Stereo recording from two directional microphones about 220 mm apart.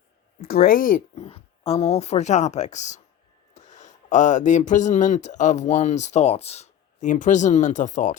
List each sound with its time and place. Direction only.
0.4 s a woman's voice: 45° left (ahead or behind)